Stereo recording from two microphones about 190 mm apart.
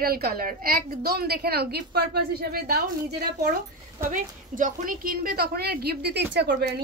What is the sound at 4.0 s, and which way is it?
A woman's voice, 45° right (ahead or behind).